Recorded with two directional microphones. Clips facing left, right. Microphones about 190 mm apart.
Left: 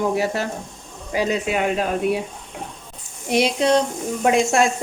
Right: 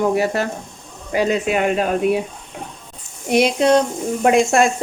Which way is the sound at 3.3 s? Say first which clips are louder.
Right 3 dB; 50° right (ahead or behind).